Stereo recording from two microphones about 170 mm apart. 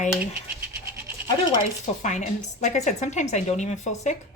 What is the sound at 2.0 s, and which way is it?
A woman's voice, 45° left (ahead or behind).